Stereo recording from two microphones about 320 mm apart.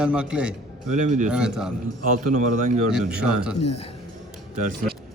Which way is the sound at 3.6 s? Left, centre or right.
Centre.